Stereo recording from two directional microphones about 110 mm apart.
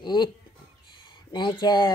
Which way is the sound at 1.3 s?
45° left (ahead or behind).